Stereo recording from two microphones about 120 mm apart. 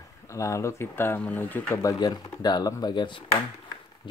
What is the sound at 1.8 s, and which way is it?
Speech, 35° left (ahead or behind).